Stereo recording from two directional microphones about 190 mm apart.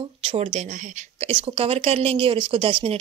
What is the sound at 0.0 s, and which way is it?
Speech, 30° right (ahead or behind).